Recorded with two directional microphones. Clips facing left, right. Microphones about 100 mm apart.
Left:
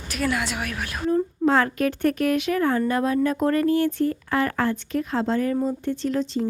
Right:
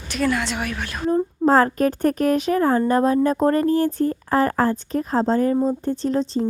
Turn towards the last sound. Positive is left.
turn(degrees=-35)  # may be behind; listen again after turning